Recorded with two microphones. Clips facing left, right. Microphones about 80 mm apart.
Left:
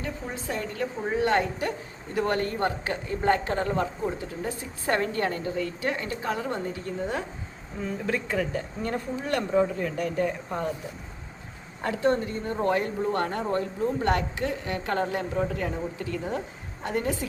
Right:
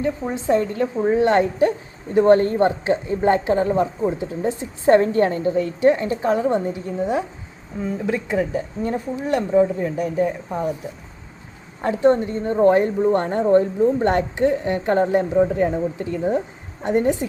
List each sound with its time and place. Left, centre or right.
0.0 s speech: right; by 10.7 s centre
11.8 s speech: right